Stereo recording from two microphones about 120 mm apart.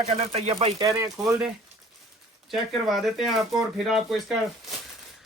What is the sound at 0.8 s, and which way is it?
Speech, 25° right (ahead or behind).